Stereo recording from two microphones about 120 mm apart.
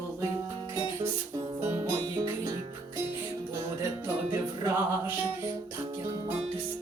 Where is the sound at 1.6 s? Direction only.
20° right (ahead or behind).